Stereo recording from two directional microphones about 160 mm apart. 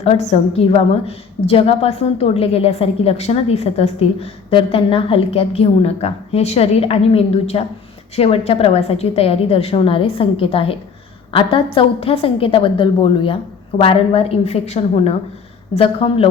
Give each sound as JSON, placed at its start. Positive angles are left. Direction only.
{"t": 0.0, "sound": "a woman's voice", "side_deg": 45}